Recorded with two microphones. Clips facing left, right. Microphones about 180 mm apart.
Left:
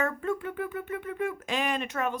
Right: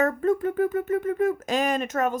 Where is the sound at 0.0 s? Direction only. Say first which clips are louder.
Right 7 dB; 40° right (ahead or behind).